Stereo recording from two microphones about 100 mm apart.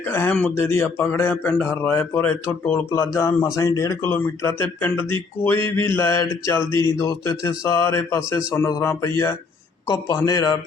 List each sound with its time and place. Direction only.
0.0 s speech: 20° left (ahead or behind); by 4.1 s 35° left (ahead or behind)
4.4 s a man's voice: 25° left (ahead or behind)